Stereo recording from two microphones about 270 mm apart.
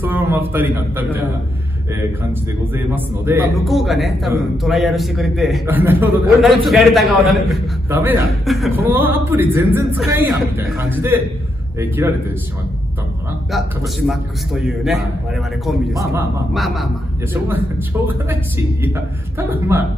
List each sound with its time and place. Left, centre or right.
0.0 s a man's voice: centre
2.7 s a man's voice: centre
13.5 s a man's voice: centre
15.9 s a man's voice: centre
16.5 s a man's voice: centre